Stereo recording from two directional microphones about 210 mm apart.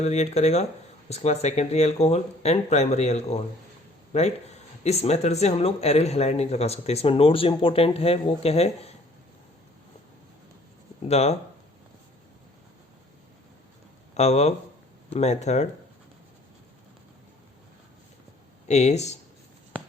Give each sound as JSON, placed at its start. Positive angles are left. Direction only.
{"t": 0.0, "sound": "speech", "side_deg": 30}
{"t": 11.1, "sound": "speech", "side_deg": 30}
{"t": 14.1, "sound": "speech", "side_deg": 30}
{"t": 18.7, "sound": "speech", "side_deg": 30}